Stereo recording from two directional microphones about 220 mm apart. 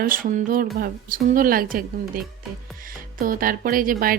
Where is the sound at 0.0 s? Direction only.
40° right (ahead or behind).